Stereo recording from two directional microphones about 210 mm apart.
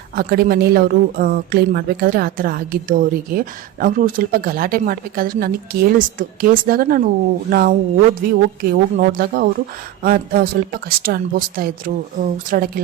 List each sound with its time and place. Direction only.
0.2 s a woman's voice: 45° right (ahead or behind)